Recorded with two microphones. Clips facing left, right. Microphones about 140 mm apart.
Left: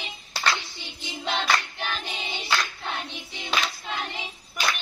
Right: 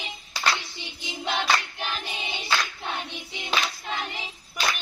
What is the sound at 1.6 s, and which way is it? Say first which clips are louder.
Choir: even; 15° right (ahead or behind).